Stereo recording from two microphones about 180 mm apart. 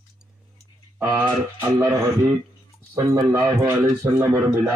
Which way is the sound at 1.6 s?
15° right (ahead or behind).